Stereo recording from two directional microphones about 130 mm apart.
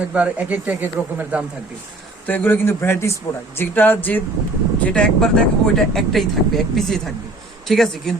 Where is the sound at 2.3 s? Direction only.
15° left (ahead or behind).